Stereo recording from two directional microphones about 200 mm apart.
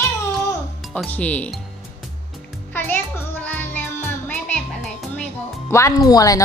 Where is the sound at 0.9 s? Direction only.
5° left (ahead or behind).